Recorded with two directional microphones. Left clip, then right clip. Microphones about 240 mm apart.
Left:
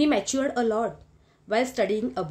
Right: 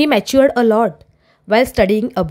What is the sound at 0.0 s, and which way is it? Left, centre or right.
A woman's voice, right.